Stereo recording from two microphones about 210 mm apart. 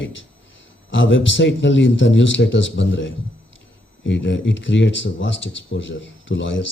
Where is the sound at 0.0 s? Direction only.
60° left (ahead or behind).